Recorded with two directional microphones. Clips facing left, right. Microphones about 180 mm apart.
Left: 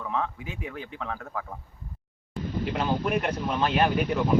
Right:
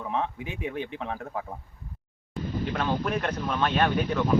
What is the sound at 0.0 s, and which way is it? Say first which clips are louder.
Speech: right 1 dB; 20° right (ahead or behind).